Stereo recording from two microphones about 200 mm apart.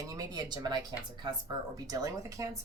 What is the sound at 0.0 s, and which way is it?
Speech, 20° right (ahead or behind).